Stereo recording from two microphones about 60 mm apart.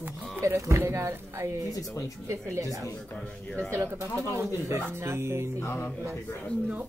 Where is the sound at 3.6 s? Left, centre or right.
Right.